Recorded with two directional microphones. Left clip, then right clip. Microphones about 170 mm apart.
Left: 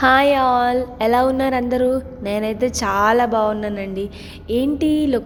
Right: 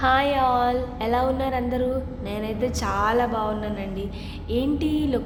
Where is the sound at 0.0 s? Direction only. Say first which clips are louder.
Left 6 dB; 45° left (ahead or behind).